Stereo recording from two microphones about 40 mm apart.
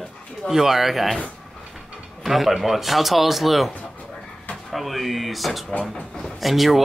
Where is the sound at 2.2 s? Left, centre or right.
Centre.